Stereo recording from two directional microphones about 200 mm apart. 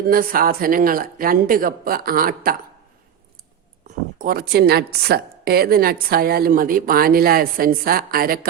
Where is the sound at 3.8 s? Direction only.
45° right (ahead or behind).